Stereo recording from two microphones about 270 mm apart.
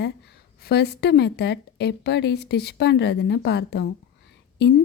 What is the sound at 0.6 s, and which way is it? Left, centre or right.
A woman's voice, left.